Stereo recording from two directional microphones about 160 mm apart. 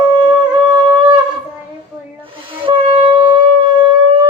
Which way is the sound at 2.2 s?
35° right (ahead or behind).